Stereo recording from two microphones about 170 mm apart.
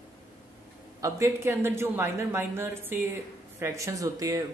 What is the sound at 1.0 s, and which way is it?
Speech, 15° right (ahead or behind).